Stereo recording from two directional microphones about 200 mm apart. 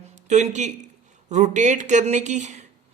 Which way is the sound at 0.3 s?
35° right (ahead or behind).